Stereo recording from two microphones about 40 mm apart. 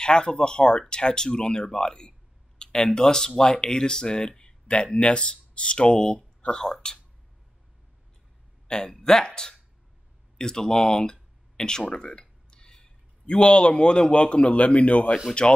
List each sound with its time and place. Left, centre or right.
0.0 s speech: left
8.6 s speech: left
10.3 s a sound: centre
13.3 s speech: left